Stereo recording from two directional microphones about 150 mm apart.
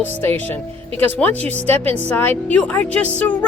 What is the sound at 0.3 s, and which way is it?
Speech, 15° left (ahead or behind).